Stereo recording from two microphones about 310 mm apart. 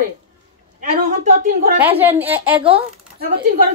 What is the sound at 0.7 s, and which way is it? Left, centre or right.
A woman's voice, right.